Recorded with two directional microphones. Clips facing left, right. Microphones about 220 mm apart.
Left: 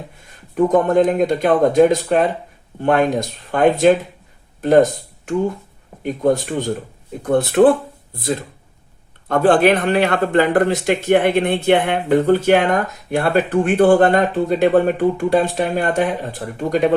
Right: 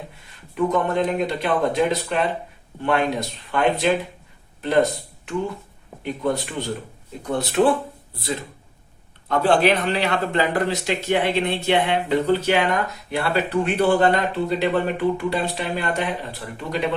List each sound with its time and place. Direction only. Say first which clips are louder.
0.5 s speech: left 7 dB; 45° left (ahead or behind)
9.3 s speech: left 5 dB; 50° left (ahead or behind)